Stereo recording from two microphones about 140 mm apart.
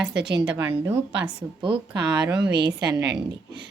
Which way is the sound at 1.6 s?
35° right (ahead or behind).